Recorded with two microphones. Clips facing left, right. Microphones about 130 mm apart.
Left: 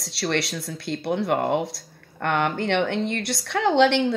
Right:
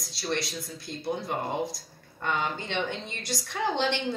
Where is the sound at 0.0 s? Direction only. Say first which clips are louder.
Left 6 dB; 75° left (ahead or behind).